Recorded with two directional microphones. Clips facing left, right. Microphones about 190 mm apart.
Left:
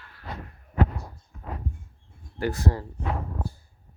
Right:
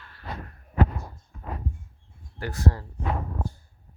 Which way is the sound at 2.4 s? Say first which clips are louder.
Left 2 dB; 20° left (ahead or behind).